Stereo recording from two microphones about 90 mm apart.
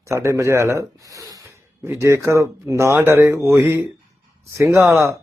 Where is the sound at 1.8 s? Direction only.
30° right (ahead or behind).